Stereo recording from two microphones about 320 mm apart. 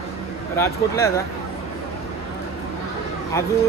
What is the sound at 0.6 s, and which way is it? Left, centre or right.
Speech, centre.